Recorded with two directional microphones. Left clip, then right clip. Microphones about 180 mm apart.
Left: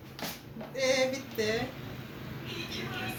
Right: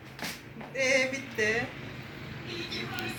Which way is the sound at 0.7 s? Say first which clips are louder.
Right 1 dB; 70° left (ahead or behind).